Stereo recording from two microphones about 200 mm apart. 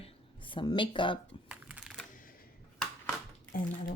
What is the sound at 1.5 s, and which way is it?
Music, 5° right (ahead or behind).